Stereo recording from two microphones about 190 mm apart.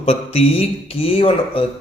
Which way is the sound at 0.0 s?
30° left (ahead or behind).